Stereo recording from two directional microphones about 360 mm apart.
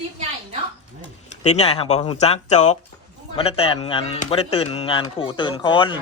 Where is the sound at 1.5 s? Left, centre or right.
Centre.